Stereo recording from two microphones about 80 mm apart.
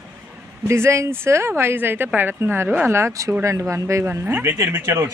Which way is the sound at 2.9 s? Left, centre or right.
Right.